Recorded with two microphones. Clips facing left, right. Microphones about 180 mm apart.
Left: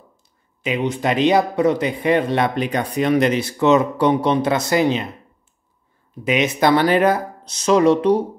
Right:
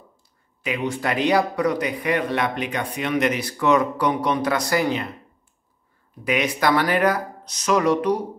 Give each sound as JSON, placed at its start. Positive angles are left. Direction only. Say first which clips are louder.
{"t": 0.6, "sound": "speech", "louder": "left 4 dB", "side_deg": 20}
{"t": 6.2, "sound": "speech", "louder": "left 4 dB", "side_deg": 25}